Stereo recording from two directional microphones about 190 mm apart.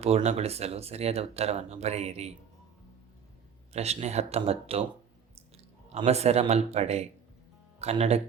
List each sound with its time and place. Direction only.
0.0 s speech: 35° right (ahead or behind)
3.7 s speech: 35° right (ahead or behind)
5.9 s speech: 35° right (ahead or behind)